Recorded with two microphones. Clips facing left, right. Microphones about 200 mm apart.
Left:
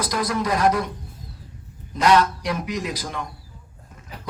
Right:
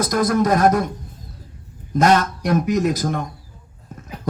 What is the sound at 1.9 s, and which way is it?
A man's voice, 45° right (ahead or behind).